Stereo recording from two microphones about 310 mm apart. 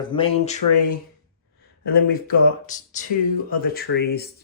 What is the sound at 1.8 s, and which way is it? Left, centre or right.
Speech, left.